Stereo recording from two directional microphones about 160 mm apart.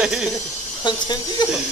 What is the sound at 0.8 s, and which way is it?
Speech, 25° left (ahead or behind).